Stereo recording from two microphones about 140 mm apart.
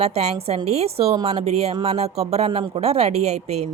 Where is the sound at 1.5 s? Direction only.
45° right (ahead or behind).